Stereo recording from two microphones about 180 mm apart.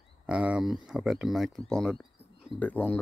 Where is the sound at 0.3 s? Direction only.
5° right (ahead or behind).